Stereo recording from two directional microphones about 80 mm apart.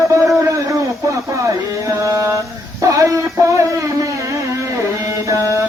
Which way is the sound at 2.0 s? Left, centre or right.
Right.